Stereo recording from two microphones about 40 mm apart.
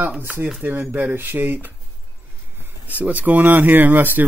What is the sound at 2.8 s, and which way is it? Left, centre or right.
Speech, right.